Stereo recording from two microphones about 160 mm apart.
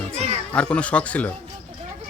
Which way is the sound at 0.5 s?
5° left (ahead or behind).